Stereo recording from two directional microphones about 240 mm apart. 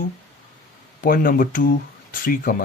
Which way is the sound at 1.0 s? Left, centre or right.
Left.